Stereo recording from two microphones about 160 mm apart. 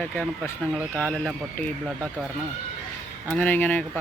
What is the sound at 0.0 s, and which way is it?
Speech, 10° left (ahead or behind).